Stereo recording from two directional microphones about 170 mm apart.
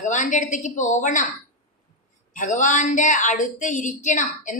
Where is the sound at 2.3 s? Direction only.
50° left (ahead or behind).